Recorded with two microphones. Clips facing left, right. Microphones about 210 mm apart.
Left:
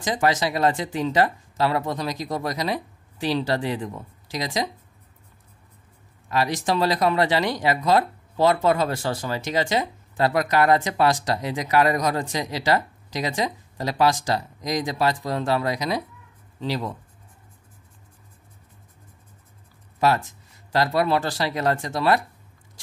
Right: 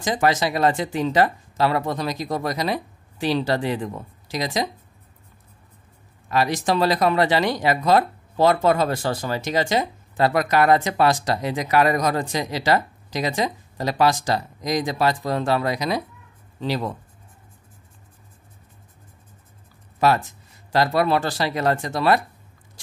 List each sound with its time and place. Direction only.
0.0 s speech: 55° right (ahead or behind)
6.3 s speech: 55° right (ahead or behind)
10.1 s speech: 60° right (ahead or behind)
20.9 s speech: 60° right (ahead or behind)